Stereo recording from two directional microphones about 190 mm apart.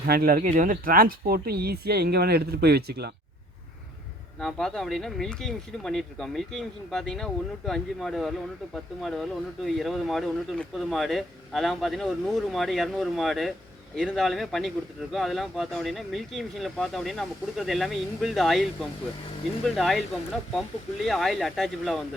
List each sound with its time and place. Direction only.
0.0 s speech: 55° right (ahead or behind)
4.4 s speech: centre (ahead or behind)